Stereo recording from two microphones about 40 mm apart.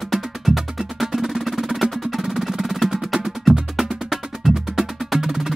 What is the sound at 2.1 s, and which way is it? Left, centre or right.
Percussion, centre.